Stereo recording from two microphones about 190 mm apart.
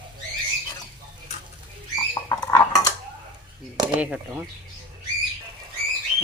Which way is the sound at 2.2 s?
15° left (ahead or behind).